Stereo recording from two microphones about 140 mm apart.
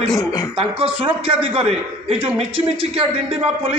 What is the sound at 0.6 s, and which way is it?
A man's voice, 40° right (ahead or behind).